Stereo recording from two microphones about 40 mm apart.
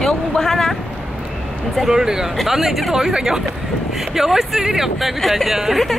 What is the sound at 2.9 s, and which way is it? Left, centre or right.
Speech, centre.